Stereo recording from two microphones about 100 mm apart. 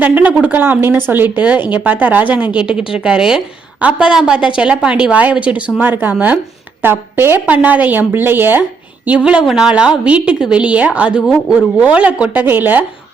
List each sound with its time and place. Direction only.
0.0 s a woman's voice: 15° right (ahead or behind)